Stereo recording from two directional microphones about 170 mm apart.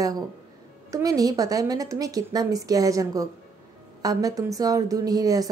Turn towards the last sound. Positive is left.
turn(degrees=-20)  # may be behind; listen again after turning